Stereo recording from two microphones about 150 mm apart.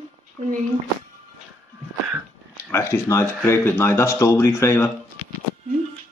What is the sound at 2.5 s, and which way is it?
Speech, 20° left (ahead or behind).